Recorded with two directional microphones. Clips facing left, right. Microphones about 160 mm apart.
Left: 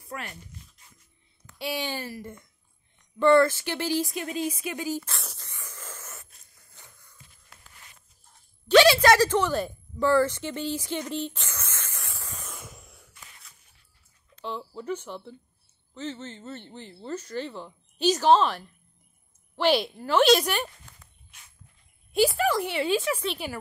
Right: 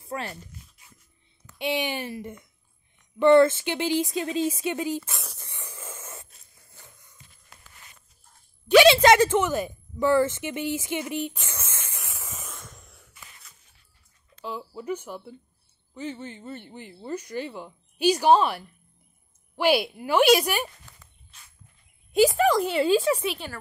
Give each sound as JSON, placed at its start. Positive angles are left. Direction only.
{"t": 0.0, "sound": "speech", "side_deg": -30}
{"t": 1.6, "sound": "speech", "side_deg": -20}
{"t": 5.1, "sound": "speech", "side_deg": 0}
{"t": 5.5, "sound": "a sound", "side_deg": -25}
{"t": 5.9, "sound": "wheeze", "side_deg": -25}
{"t": 8.6, "sound": "a sound", "side_deg": -15}
{"t": 8.9, "sound": "speech", "side_deg": -20}
{"t": 11.4, "sound": "a sound", "side_deg": -25}
{"t": 12.3, "sound": "spray", "side_deg": -5}
{"t": 12.5, "sound": "a sound", "side_deg": 5}
{"t": 14.3, "sound": "speech", "side_deg": -5}
{"t": 22.6, "sound": "speech", "side_deg": -30}
{"t": 23.4, "sound": "a woman's voice", "side_deg": 10}